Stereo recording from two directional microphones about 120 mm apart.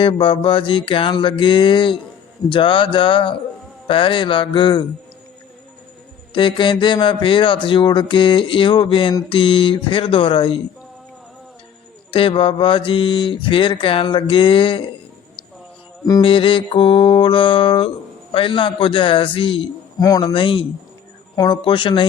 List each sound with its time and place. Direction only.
0.0 s mantra: 45° left (ahead or behind)
6.3 s mantra: 45° left (ahead or behind)
12.1 s mantra: 50° left (ahead or behind)
16.2 s mantra: 45° left (ahead or behind)
20.0 s speech: 30° left (ahead or behind)
20.2 s mantra: 45° left (ahead or behind)